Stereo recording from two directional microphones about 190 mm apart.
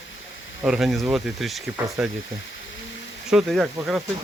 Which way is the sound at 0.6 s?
5° right (ahead or behind).